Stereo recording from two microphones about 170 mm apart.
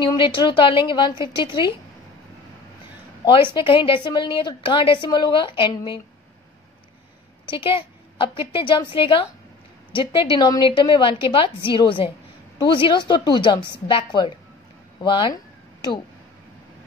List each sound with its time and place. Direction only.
0.0 s a woman's voice: 30° left (ahead or behind)
3.5 s a woman's voice: 30° left (ahead or behind)
7.4 s a woman's voice: 30° left (ahead or behind)
15.0 s a sound: 25° left (ahead or behind)